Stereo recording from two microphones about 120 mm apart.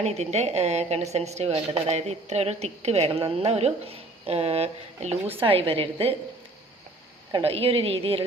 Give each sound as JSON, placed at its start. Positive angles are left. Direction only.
{"t": 0.0, "sound": "a woman's voice", "side_deg": -65}
{"t": 7.4, "sound": "a woman's voice", "side_deg": -55}